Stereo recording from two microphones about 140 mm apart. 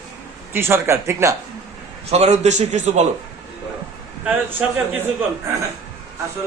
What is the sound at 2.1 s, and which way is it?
Speech, 50° right (ahead or behind).